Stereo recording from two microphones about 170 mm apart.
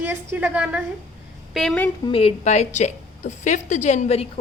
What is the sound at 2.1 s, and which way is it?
A woman's voice, 35° left (ahead or behind).